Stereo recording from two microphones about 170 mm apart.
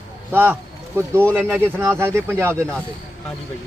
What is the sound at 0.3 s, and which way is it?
A man's voice, 10° right (ahead or behind).